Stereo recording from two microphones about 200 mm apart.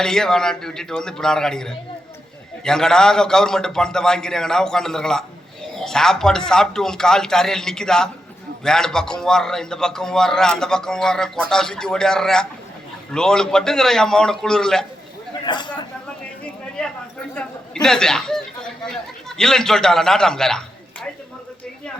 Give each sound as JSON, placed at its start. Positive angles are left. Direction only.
{"t": 0.0, "sound": "a man's voice", "side_deg": 5}
{"t": 15.4, "sound": "speech", "side_deg": 20}
{"t": 17.8, "sound": "a man's voice", "side_deg": 5}